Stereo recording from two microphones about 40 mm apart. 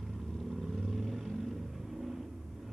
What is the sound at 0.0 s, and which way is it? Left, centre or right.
Vehicle, centre.